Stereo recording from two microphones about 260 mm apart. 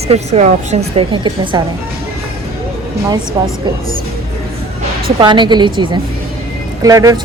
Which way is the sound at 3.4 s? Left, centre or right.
Centre.